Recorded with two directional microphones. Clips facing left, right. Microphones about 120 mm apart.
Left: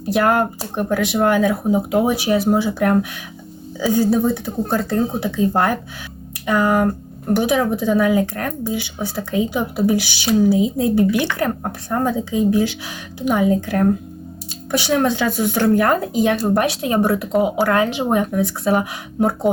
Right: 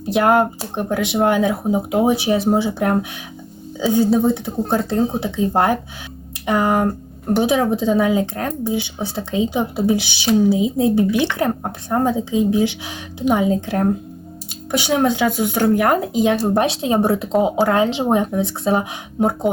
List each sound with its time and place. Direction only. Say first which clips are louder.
0.0 s speech: right 2 dB; 20° right (ahead or behind)